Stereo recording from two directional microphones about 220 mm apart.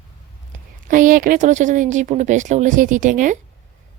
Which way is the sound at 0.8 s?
40° right (ahead or behind).